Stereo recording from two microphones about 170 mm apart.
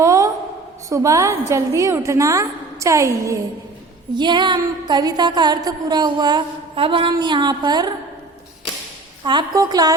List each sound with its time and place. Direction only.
0.0 s a sound: 20° right (ahead or behind)
0.9 s a woman's voice: 20° right (ahead or behind)
4.1 s music: 25° right (ahead or behind)
9.2 s music: 25° right (ahead or behind)